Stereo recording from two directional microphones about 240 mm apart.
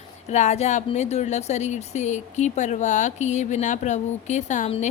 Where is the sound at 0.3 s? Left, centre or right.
Left.